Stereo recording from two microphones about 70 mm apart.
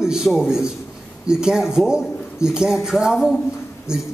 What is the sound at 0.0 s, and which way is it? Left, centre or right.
A man's voice, centre.